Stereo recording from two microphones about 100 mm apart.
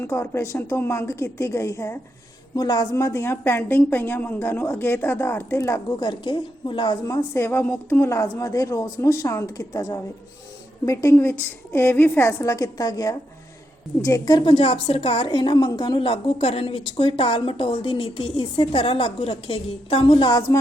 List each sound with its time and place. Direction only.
0.0 s a woman's voice: 25° left (ahead or behind)
2.6 s a woman's voice: 45° left (ahead or behind)
2.9 s a woman's voice: 25° left (ahead or behind)
6.0 s a woman's voice: 50° left (ahead or behind)
7.2 s a woman's voice: 25° left (ahead or behind)
14.4 s a woman's voice: 70° left (ahead or behind)